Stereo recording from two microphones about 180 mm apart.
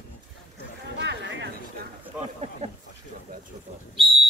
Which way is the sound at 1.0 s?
75° right (ahead or behind).